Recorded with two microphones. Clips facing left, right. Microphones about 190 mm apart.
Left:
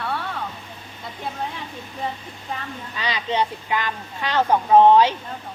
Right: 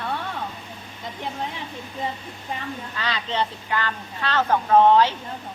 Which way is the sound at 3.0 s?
15° left (ahead or behind).